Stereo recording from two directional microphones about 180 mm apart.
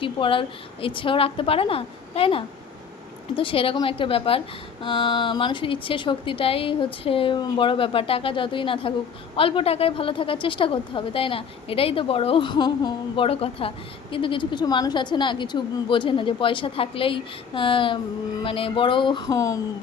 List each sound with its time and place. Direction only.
0.0 s a woman's voice: 30° left (ahead or behind)